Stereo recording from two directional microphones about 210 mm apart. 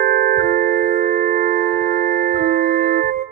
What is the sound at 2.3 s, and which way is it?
Organ, 45° right (ahead or behind).